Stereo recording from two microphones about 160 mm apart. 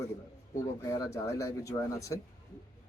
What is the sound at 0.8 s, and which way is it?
Speech, 20° left (ahead or behind).